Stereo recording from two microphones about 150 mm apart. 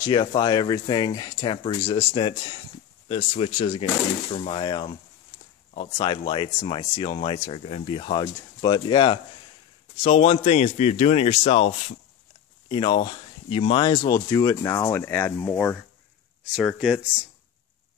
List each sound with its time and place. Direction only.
0.0 s a man's voice: 30° left (ahead or behind)
12.6 s speech: 30° left (ahead or behind); by 15.8 s 15° left (ahead or behind)
16.7 s speech: centre (ahead or behind)